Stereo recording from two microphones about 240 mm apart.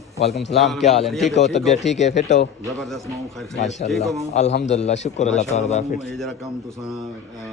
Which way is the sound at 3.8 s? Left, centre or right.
Centre.